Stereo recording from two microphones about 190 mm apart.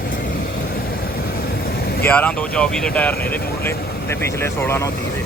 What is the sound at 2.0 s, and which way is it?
Speech, 5° left (ahead or behind).